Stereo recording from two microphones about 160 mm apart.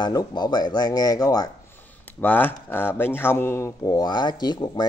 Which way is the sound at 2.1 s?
10° left (ahead or behind).